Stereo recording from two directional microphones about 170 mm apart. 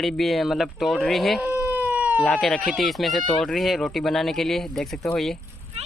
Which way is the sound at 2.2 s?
5° left (ahead or behind).